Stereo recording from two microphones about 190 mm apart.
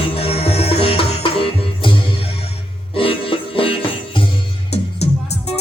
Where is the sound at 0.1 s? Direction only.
30° left (ahead or behind).